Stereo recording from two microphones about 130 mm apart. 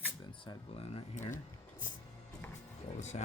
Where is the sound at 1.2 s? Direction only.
75° left (ahead or behind).